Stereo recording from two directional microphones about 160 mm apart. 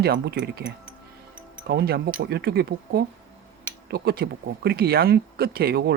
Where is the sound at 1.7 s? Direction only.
80° right.